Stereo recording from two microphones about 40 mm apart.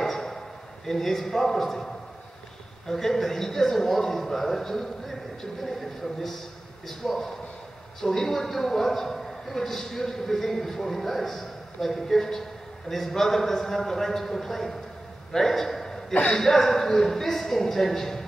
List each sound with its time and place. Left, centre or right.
0.0 s a sound: centre
0.8 s a man's voice: centre
2.9 s a man's voice: centre
15.3 s a sound: centre
16.1 s speech: left
16.3 s a man's voice: centre